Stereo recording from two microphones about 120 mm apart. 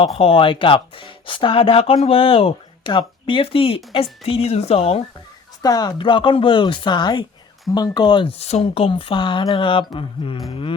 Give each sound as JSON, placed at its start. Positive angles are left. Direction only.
{"t": 0.2, "sound": "a woman's voice", "side_deg": 50}
{"t": 5.6, "sound": "speech", "side_deg": 30}
{"t": 6.0, "sound": "speech", "side_deg": 45}
{"t": 8.4, "sound": "speech", "side_deg": 60}